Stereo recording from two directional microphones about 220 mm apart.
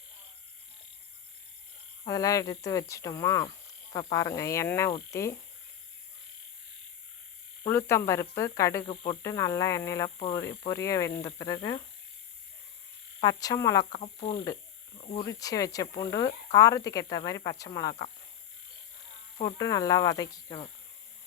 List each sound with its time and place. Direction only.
2.0 s speech: 15° left (ahead or behind)
7.7 s speech: 10° left (ahead or behind)
10.2 s speech: 25° left (ahead or behind)
10.6 s speech: 15° left (ahead or behind)
13.2 s speech: 15° left (ahead or behind)
14.0 s speech: 25° left (ahead or behind)
19.4 s speech: 15° left (ahead or behind)